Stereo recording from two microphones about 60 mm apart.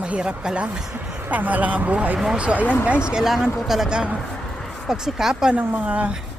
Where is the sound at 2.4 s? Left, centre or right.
Right.